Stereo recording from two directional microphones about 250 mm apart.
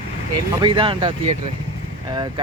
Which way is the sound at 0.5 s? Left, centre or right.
Centre.